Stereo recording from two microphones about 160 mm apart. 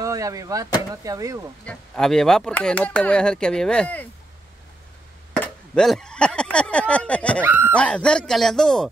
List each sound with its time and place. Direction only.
0.0 s speech: 20° right (ahead or behind)
1.7 s speech: 5° left (ahead or behind)
5.3 s speech: 5° left (ahead or behind)
7.4 s speech: 10° right (ahead or behind)
7.7 s speech: 5° left (ahead or behind)